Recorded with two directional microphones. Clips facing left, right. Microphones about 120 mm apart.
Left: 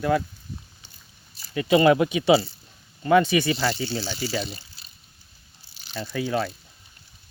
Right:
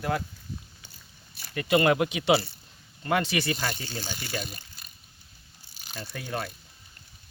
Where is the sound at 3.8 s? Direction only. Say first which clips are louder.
Left 8 dB; 50° right (ahead or behind).